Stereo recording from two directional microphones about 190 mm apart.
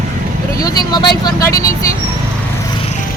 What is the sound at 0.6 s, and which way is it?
Speech, 20° left (ahead or behind).